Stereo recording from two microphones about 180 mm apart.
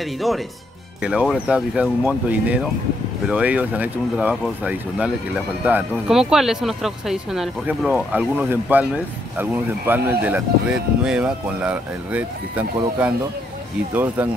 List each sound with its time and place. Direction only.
1.0 s speech: 5° right (ahead or behind)